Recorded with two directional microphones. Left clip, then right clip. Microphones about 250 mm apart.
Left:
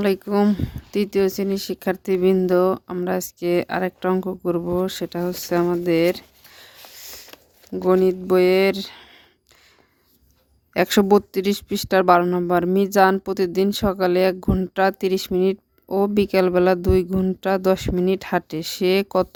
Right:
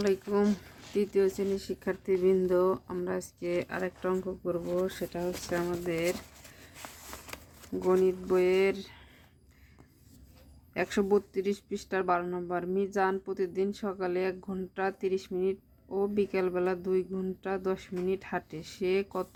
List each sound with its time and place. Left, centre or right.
0.0 s speech: left
7.7 s speech: left
10.8 s speech: left